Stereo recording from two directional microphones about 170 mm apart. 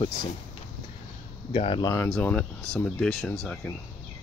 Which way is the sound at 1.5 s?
30° left (ahead or behind).